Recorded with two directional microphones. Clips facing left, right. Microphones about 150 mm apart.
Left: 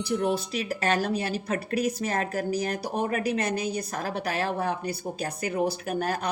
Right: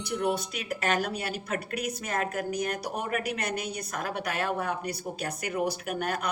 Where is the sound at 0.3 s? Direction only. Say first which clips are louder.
Left 4 dB; 30° left (ahead or behind).